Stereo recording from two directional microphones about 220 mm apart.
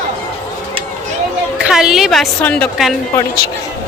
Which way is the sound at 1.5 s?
5° right (ahead or behind).